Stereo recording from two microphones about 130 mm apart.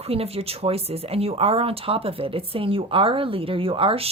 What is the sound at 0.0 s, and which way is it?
Speech, 50° right (ahead or behind).